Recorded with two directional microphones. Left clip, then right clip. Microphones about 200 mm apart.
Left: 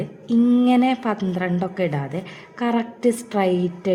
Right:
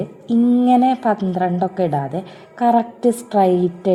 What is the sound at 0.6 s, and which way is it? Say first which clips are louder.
A woman's voice: right 5 dB; 20° right (ahead or behind).